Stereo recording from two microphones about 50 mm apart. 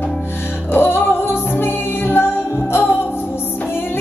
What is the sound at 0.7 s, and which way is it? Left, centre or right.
Music, left.